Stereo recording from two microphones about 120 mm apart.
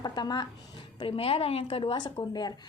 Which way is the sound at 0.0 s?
35° left (ahead or behind).